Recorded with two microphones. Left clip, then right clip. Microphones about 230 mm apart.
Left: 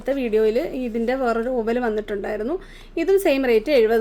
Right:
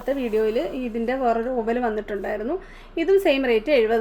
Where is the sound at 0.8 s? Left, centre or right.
Left.